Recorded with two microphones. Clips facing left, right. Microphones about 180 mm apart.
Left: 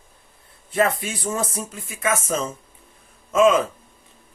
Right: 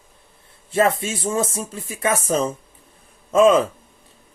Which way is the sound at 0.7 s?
25° right (ahead or behind).